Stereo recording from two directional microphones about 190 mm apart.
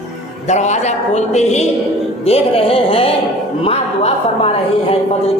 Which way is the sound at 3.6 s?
30° left (ahead or behind).